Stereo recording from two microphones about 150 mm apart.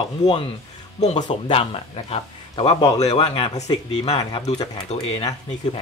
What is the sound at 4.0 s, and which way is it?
Speech, 35° left (ahead or behind).